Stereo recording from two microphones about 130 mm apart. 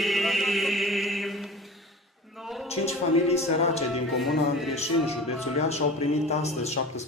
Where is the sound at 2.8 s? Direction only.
55° left (ahead or behind).